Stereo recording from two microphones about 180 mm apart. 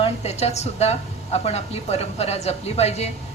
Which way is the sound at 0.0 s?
35° left (ahead or behind).